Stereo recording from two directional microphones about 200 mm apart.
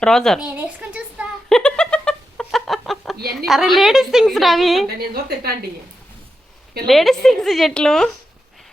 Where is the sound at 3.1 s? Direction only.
50° right (ahead or behind).